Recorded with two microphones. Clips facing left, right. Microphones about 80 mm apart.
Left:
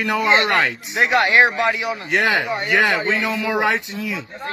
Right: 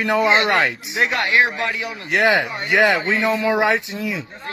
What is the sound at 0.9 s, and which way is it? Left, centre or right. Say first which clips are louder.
A man's voice: left 3 dB; centre.